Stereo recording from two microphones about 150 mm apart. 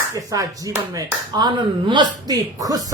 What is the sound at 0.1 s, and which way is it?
Speech, 20° right (ahead or behind).